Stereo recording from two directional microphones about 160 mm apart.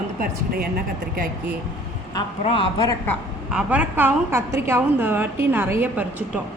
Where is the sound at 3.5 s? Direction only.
10° right (ahead or behind).